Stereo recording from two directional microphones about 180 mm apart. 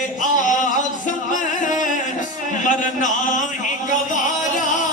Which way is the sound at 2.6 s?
45° left (ahead or behind).